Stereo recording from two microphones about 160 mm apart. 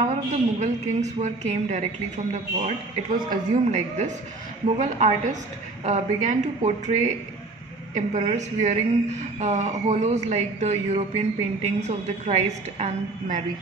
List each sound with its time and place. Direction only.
0.1 s a woman's voice: 45° right (ahead or behind)
3.3 s a woman's voice: 50° right (ahead or behind)